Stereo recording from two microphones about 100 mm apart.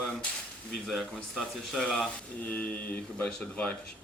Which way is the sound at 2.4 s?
15° left (ahead or behind).